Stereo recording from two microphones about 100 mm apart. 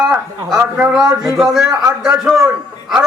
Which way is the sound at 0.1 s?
15° right (ahead or behind).